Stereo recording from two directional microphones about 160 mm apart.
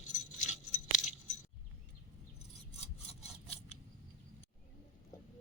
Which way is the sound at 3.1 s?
40° left (ahead or behind).